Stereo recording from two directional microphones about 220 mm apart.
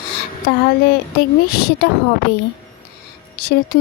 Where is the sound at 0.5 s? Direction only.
45° left (ahead or behind).